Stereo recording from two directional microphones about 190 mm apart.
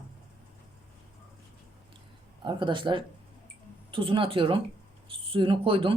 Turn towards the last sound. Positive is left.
turn(degrees=-25)  # may be behind; listen again after turning